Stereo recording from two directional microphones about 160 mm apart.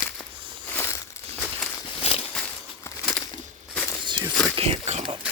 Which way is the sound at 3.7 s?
10° left (ahead or behind).